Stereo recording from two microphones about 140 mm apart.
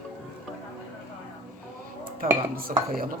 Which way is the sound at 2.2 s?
90° right.